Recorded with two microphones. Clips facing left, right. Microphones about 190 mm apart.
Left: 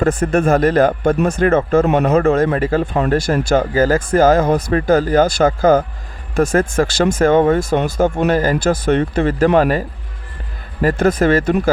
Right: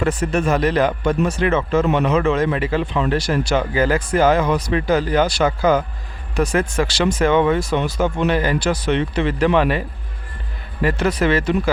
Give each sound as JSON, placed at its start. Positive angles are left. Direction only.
{"t": 0.0, "sound": "speech", "side_deg": 50}